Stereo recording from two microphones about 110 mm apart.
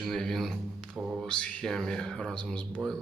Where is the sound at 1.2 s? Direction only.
10° left (ahead or behind).